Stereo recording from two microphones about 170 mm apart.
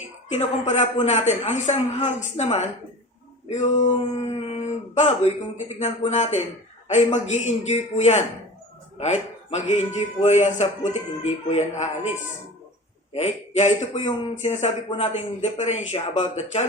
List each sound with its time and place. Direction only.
0.0 s speech: 45° left (ahead or behind)
13.1 s speech: 40° left (ahead or behind)